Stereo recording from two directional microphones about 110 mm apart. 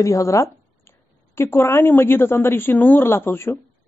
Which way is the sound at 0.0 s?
30° left (ahead or behind).